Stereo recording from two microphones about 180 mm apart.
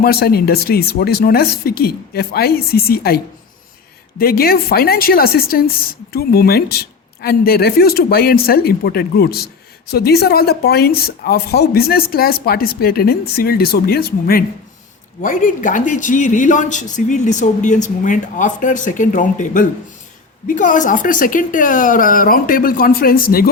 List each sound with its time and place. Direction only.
0.0 s speech: 60° left (ahead or behind)
4.2 s speech: 55° left (ahead or behind)
15.2 s speech: 45° left (ahead or behind)